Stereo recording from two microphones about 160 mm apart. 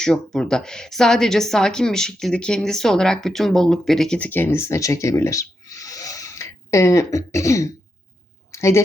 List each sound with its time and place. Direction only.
0.0 s a woman's voice: 5° left (ahead or behind)